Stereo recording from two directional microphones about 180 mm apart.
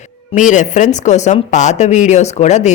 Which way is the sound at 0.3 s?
45° left (ahead or behind).